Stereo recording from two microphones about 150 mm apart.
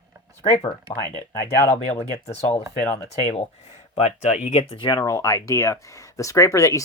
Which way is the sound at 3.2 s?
45° left (ahead or behind).